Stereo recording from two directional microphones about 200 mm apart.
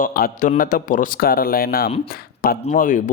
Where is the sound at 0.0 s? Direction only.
45° left (ahead or behind).